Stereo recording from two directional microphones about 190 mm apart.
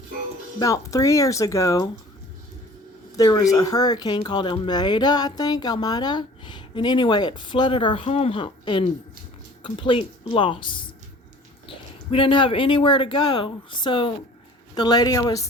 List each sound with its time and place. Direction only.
0.6 s speech: 20° left (ahead or behind)
3.2 s speech: 20° left (ahead or behind)
12.1 s speech: 25° left (ahead or behind)